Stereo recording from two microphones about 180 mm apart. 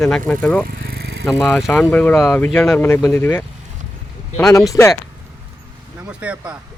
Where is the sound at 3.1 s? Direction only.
10° left (ahead or behind).